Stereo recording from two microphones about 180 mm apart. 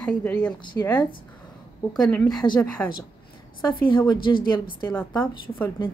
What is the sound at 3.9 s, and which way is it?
Speech, 25° left (ahead or behind).